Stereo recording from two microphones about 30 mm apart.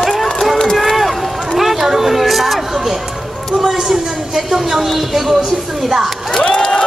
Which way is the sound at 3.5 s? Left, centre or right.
Centre.